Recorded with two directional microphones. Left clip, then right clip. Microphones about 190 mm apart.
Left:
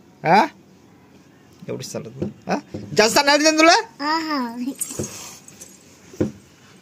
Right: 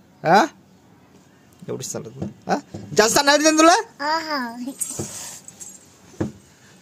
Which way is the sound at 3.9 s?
15° right (ahead or behind).